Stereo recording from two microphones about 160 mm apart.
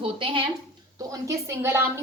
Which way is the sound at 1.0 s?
20° right (ahead or behind).